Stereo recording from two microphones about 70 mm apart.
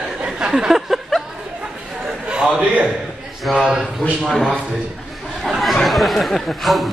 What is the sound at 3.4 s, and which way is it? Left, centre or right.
Speech, centre.